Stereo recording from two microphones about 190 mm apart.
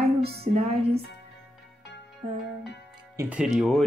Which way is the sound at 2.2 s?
35° right (ahead or behind).